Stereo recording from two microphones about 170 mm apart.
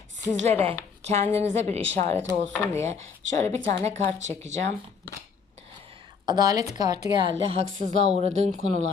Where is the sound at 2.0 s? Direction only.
50° right (ahead or behind).